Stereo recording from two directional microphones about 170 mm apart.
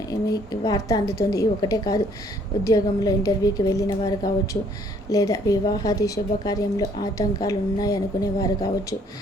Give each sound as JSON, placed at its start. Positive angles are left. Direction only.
{"t": 0.1, "sound": "a woman's voice", "side_deg": 20}